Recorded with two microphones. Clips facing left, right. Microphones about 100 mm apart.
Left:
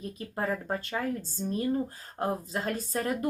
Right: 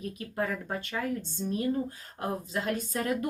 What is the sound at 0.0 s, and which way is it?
Speech, 30° left (ahead or behind).